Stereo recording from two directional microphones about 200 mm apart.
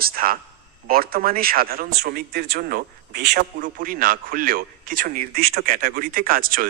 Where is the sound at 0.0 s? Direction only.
45° right (ahead or behind).